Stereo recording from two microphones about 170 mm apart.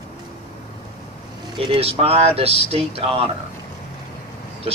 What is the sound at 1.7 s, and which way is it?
Speech, 35° right (ahead or behind).